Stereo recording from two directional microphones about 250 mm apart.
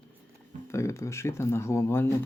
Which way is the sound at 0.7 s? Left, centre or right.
Centre.